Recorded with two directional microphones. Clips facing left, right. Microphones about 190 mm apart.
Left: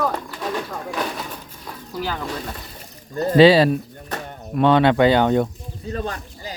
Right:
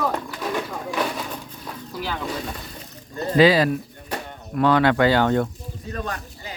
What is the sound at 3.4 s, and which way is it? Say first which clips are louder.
Speech: left 4 dB; 30° left (ahead or behind).